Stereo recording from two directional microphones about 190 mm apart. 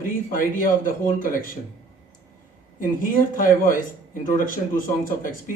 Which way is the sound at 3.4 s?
45° left (ahead or behind).